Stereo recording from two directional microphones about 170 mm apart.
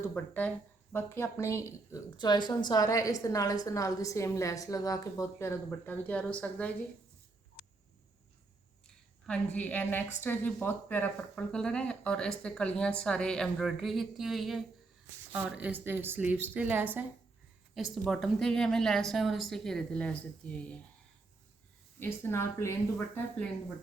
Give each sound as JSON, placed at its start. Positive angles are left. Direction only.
{"t": 0.0, "sound": "a woman's voice", "side_deg": 10}
{"t": 7.6, "sound": "frog", "side_deg": -5}
{"t": 9.2, "sound": "a woman's voice", "side_deg": 5}
{"t": 21.9, "sound": "speech", "side_deg": 15}